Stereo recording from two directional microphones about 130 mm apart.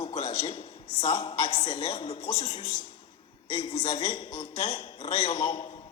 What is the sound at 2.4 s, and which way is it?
Speech, 50° left (ahead or behind).